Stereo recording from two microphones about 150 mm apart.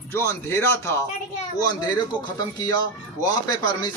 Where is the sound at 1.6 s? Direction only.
25° left (ahead or behind).